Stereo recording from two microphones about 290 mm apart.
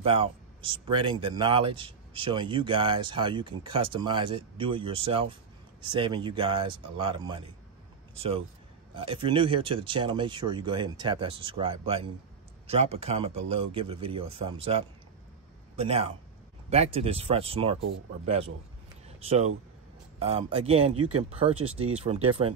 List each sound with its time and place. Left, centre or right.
0.0 s a man's voice: centre
19.0 s a sound: right
20.2 s speech: centre